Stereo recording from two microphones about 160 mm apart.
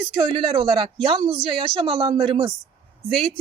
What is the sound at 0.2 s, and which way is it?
Speech, 30° right (ahead or behind).